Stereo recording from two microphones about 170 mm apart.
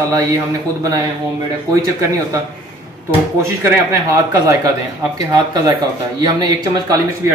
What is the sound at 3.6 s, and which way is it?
Speech, 20° right (ahead or behind).